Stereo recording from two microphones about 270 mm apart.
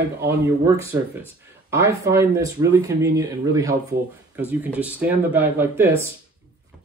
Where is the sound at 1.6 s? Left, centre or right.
Centre.